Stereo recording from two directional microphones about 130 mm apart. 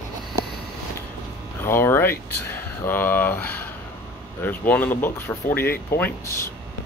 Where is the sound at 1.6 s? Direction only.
20° left (ahead or behind).